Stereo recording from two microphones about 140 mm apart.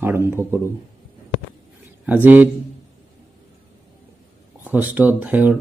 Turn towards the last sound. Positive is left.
turn(degrees=-10)  # may be behind; listen again after turning